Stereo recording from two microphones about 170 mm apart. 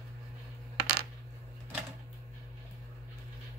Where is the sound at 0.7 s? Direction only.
70° right (ahead or behind).